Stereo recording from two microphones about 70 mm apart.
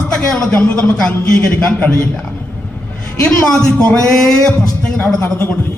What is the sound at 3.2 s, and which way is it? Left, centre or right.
A man's voice, centre.